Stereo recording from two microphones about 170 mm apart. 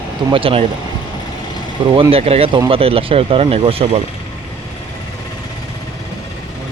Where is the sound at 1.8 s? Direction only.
30° right (ahead or behind).